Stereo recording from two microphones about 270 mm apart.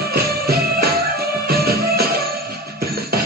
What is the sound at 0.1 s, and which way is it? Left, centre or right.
Music, right.